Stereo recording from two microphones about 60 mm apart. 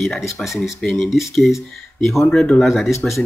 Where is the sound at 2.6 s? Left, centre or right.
Centre.